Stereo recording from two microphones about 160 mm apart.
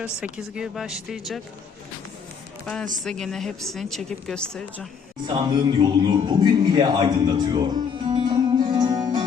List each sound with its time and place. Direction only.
0.0 s a woman's voice: 5° right (ahead or behind)
3.0 s a woman's voice: 5° left (ahead or behind)
5.2 s a man's voice: 25° right (ahead or behind)